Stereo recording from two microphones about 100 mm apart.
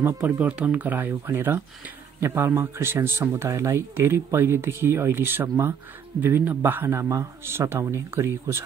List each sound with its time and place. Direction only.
0.0 s speech: 20° right (ahead or behind)